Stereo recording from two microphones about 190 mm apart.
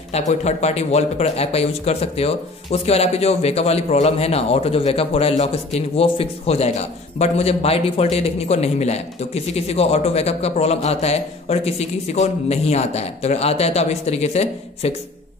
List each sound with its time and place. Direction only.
0.1 s speech: 35° left (ahead or behind)